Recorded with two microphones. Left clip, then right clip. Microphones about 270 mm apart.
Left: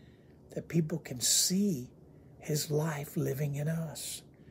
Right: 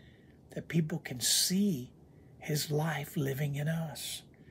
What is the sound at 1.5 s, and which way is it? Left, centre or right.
Speech, right.